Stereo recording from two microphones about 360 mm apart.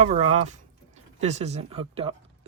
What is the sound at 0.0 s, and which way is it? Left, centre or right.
Speech, centre.